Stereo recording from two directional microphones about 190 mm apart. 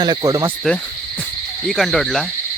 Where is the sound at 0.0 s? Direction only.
20° right (ahead or behind).